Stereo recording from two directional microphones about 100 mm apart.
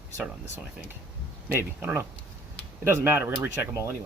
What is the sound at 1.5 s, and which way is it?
Speech, 25° right (ahead or behind).